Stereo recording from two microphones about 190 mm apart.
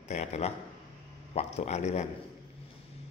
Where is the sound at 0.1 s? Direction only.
35° left (ahead or behind).